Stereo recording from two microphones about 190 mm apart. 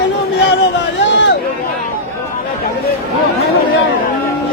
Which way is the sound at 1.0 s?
70° left (ahead or behind).